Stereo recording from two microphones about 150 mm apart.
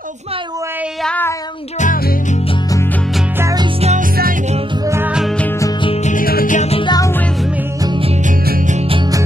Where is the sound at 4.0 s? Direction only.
70° right (ahead or behind).